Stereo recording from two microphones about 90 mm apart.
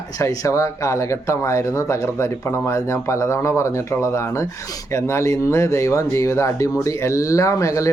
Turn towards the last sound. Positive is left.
turn(degrees=35)  # may be behind; listen again after turning